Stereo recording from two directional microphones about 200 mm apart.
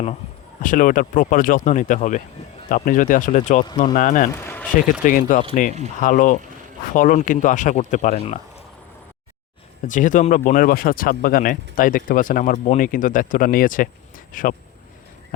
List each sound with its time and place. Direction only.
0.6 s speech: 40° left (ahead or behind)
4.4 s a sound: 10° left (ahead or behind)
5.0 s speech: 40° left (ahead or behind)
9.8 s speech: 40° left (ahead or behind)